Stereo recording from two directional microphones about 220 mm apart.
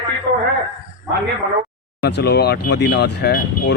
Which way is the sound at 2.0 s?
50° left (ahead or behind).